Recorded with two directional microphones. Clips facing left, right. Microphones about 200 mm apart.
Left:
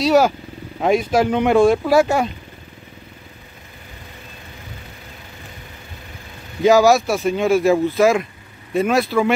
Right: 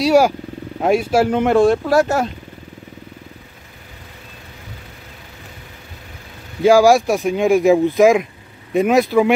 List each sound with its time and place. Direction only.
0.0 s speech: 10° right (ahead or behind)
6.6 s speech: 10° right (ahead or behind)